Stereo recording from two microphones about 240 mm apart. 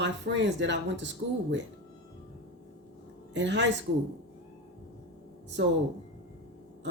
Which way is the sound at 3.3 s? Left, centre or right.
Right.